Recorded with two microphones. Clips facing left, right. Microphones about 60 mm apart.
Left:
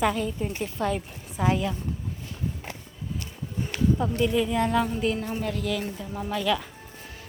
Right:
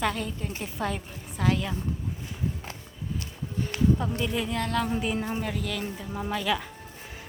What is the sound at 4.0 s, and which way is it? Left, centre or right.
Speech, centre.